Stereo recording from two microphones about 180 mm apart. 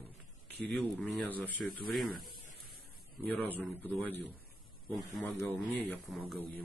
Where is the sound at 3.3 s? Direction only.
10° left (ahead or behind).